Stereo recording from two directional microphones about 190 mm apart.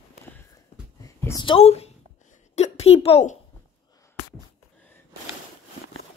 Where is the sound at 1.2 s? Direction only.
20° left (ahead or behind).